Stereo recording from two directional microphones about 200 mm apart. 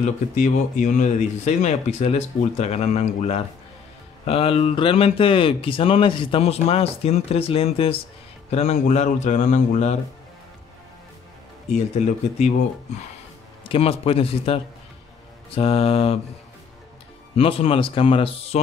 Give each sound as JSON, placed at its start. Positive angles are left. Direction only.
{"t": 0.0, "sound": "speech", "side_deg": 35}
{"t": 11.7, "sound": "speech", "side_deg": 35}
{"t": 13.7, "sound": "speech", "side_deg": 30}
{"t": 17.4, "sound": "speech", "side_deg": 25}